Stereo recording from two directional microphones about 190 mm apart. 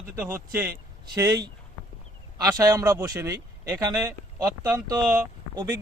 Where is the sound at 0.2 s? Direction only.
10° right (ahead or behind).